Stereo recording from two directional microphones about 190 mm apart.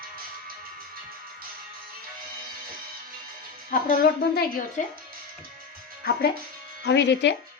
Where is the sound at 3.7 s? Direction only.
45° left (ahead or behind).